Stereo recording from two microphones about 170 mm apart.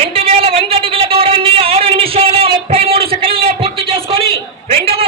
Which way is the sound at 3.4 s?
35° right (ahead or behind).